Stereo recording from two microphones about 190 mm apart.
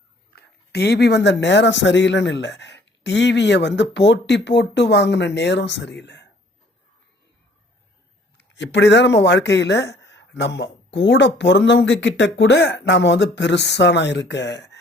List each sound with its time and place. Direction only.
0.3 s speech: 60° left (ahead or behind)
8.4 s speech: 70° left (ahead or behind)